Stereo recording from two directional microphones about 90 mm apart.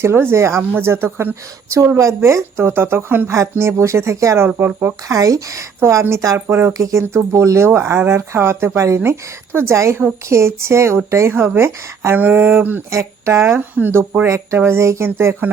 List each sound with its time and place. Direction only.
0.0 s speech: 25° right (ahead or behind)
5.0 s a woman's voice: 40° right (ahead or behind)